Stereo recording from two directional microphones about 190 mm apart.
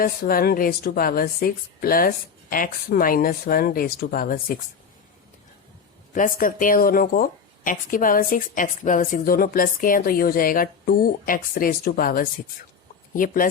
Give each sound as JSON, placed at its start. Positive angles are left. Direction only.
{"t": 0.0, "sound": "speech", "side_deg": 50}
{"t": 6.1, "sound": "speech", "side_deg": 45}